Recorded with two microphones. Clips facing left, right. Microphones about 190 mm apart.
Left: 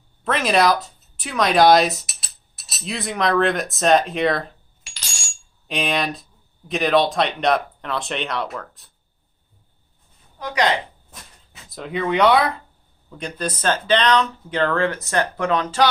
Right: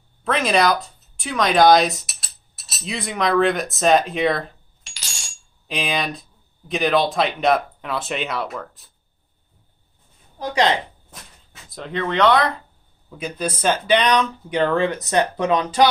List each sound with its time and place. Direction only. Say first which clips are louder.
0.3 s speech: even; centre (ahead or behind)
10.4 s speech: right 2 dB; 25° right (ahead or behind)
11.7 s speech: left 2 dB; 5° left (ahead or behind)
13.1 s speech: right 1 dB; 5° right (ahead or behind)